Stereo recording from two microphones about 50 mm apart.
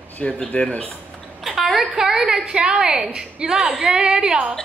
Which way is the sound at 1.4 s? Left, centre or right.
Centre.